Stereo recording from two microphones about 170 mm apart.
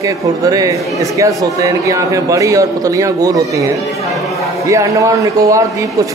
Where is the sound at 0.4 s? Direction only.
20° right (ahead or behind).